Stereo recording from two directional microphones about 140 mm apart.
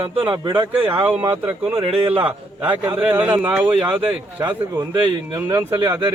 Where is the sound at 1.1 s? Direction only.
10° right (ahead or behind).